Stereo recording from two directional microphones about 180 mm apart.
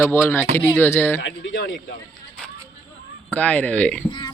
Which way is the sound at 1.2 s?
90° left.